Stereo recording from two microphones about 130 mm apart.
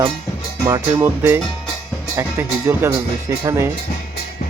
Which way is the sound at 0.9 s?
15° right (ahead or behind).